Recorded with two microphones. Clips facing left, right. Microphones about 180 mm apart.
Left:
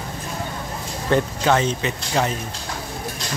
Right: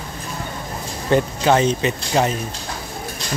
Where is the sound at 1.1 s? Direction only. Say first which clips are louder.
Right 2 dB; 20° right (ahead or behind).